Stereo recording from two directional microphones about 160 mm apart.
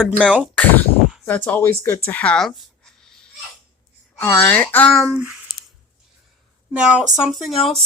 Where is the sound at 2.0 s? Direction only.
10° left (ahead or behind).